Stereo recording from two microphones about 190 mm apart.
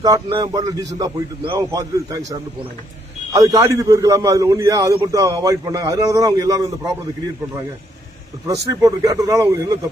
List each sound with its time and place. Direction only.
0.0 s a man's voice: 25° right (ahead or behind)
3.3 s a man's voice: 15° right (ahead or behind)
8.4 s a man's voice: 20° right (ahead or behind)